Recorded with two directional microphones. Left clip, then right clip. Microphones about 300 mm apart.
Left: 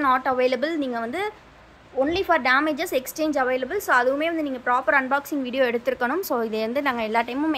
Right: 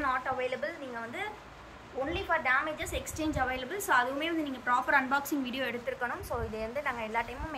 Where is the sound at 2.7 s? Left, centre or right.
Centre.